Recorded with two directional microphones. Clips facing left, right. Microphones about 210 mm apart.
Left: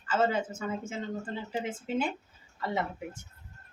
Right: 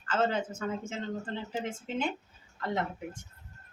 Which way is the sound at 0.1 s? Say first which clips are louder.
Left 1 dB; 10° left (ahead or behind).